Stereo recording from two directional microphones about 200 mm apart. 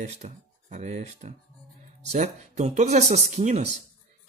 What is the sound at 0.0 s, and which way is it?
Speech, 35° right (ahead or behind).